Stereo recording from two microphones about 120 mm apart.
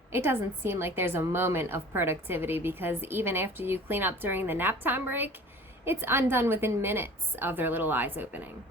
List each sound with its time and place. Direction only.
0.1 s a woman's voice: 20° right (ahead or behind)